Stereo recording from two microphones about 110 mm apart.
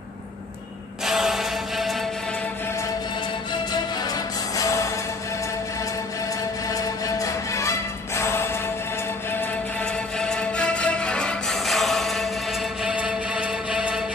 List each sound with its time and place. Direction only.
1.0 s mantra: 5° right (ahead or behind)
4.0 s music: 35° left (ahead or behind)
6.7 s music: 30° left (ahead or behind)
9.4 s music: 10° left (ahead or behind)
12.8 s music: 10° right (ahead or behind)